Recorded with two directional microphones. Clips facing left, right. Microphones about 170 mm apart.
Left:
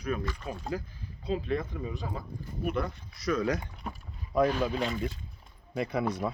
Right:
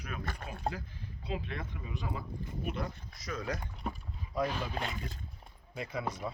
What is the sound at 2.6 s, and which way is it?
Speech, 60° left (ahead or behind).